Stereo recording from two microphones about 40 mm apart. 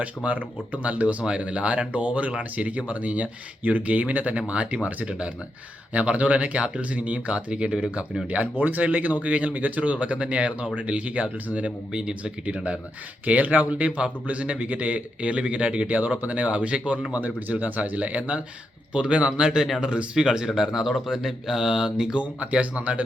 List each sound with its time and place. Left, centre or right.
0.0 s a man's voice: right
8.5 s a man's voice: right
13.2 s a man's voice: right
17.2 s a man's voice: right
19.5 s speech: centre
19.9 s speech: right
22.2 s a man's voice: right